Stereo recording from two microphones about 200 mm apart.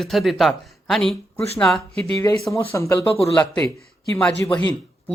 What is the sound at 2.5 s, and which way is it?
Speech, 10° left (ahead or behind).